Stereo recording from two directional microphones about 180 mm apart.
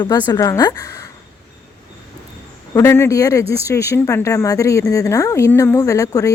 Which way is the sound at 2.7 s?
15° left (ahead or behind).